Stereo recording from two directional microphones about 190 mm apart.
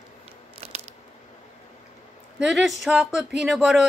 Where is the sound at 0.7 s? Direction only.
35° right (ahead or behind).